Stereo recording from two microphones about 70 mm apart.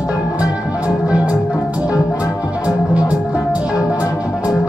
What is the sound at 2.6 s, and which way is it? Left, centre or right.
Music, centre.